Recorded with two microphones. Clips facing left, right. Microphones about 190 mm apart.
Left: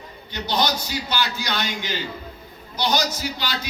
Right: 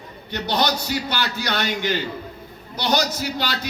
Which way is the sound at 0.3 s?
60° right (ahead or behind).